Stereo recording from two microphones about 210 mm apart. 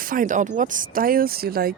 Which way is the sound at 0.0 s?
40° right (ahead or behind).